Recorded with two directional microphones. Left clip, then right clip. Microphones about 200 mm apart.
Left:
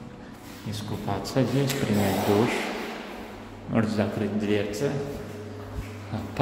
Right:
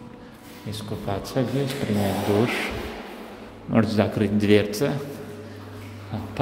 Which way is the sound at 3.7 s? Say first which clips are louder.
Right 5 dB; 30° right (ahead or behind).